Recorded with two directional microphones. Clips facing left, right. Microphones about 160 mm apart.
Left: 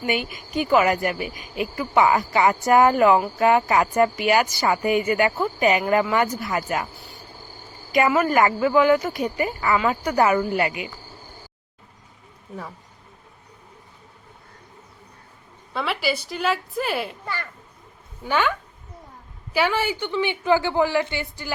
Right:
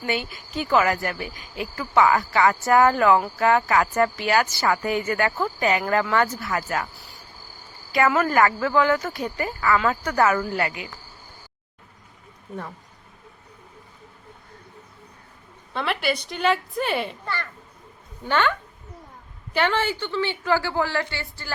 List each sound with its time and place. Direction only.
0.0 s speech: 15° left (ahead or behind)
6.9 s speech: centre (ahead or behind)
8.1 s speech: 10° left (ahead or behind)
15.7 s a woman's voice: 5° left (ahead or behind)
17.2 s speech: 10° left (ahead or behind)
19.5 s speech: 10° left (ahead or behind)